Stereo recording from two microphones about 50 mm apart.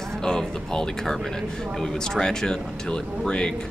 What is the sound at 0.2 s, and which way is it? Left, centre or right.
Speech, centre.